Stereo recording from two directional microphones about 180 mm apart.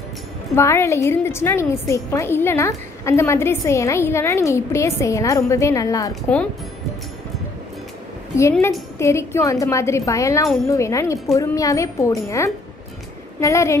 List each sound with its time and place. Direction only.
0.6 s a woman's voice: 15° left (ahead or behind)
8.4 s a woman's voice: 15° left (ahead or behind)
13.4 s a woman's voice: 15° left (ahead or behind)